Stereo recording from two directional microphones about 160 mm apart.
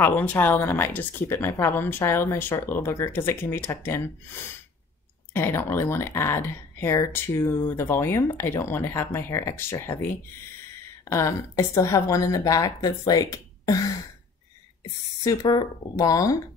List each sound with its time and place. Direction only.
0.0 s speech: 10° left (ahead or behind)
11.1 s a woman's voice: 15° left (ahead or behind)
15.2 s a woman's voice: 25° left (ahead or behind)